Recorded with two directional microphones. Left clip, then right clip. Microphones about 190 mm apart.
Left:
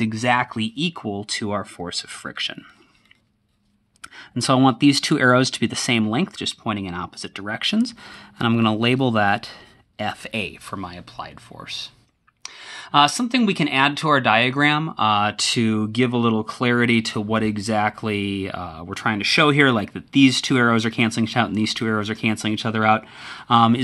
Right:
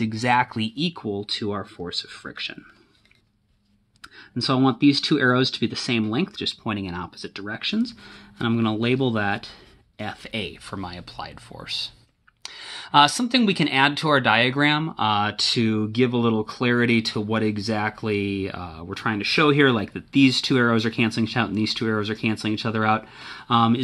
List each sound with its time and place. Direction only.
0.0 s speech: 15° left (ahead or behind)
1.0 s speech: 35° left (ahead or behind)
4.4 s speech: 40° left (ahead or behind)